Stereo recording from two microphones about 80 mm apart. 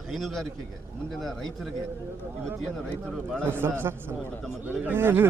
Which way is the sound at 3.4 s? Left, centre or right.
Right.